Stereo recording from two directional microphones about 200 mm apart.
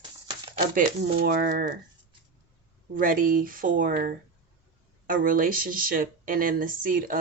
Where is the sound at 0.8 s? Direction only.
45° right (ahead or behind).